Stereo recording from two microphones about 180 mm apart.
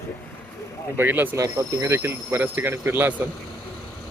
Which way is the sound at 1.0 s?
10° right (ahead or behind).